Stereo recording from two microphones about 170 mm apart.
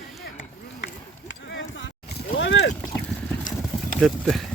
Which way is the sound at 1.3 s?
90° left.